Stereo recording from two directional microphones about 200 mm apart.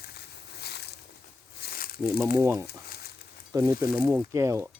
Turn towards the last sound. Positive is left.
turn(degrees=-15)  # may be behind; listen again after turning